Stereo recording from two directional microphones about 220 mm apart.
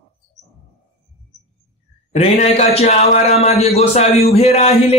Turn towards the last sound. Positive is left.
turn(degrees=30)  # may be behind; listen again after turning